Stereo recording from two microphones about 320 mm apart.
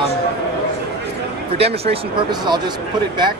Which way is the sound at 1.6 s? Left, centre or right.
Centre.